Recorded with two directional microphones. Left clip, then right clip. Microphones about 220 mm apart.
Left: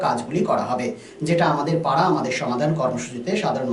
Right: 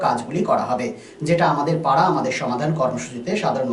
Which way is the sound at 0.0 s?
Centre (ahead or behind).